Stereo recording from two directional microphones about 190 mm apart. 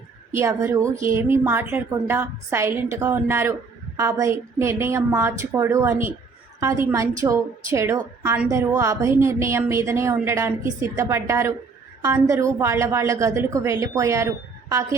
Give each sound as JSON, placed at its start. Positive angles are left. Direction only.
{"t": 0.3, "sound": "a woman's voice", "side_deg": -15}